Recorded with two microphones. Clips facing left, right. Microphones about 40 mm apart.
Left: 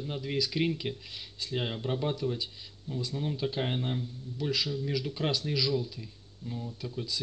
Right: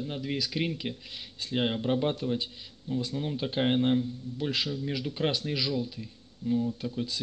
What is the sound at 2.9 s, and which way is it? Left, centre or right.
A man's voice, right.